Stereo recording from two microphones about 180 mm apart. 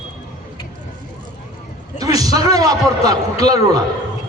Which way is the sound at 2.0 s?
20° right (ahead or behind).